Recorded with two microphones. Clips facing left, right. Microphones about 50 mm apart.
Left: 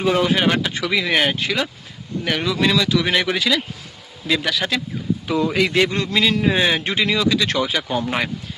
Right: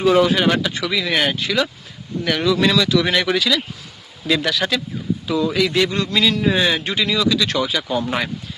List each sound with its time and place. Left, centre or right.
0.2 s a man's voice: left
3.3 s a man's voice: left
4.3 s speech: centre
5.3 s a man's voice: left